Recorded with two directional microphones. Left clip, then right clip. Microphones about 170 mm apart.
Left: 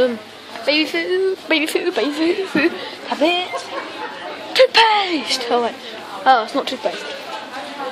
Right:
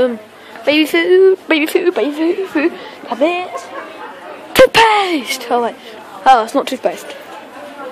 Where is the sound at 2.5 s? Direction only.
20° right (ahead or behind).